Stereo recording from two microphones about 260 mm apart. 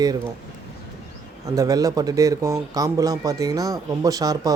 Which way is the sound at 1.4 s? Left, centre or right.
Centre.